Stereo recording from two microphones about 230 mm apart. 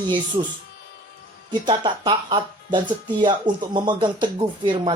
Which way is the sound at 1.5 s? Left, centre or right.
Centre.